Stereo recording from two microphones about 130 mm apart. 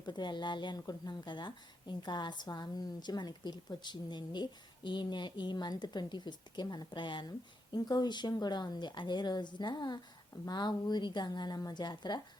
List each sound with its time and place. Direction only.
0.0 s a woman's voice: 35° left (ahead or behind)